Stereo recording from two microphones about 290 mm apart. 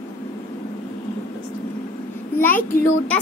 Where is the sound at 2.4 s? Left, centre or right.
Centre.